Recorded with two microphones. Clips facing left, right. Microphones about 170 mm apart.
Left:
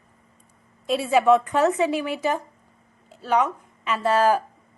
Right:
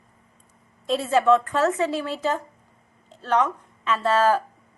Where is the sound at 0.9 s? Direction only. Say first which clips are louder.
Left 1 dB; 10° left (ahead or behind).